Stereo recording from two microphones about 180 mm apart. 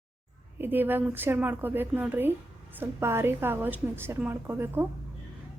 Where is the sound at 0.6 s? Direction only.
10° right (ahead or behind).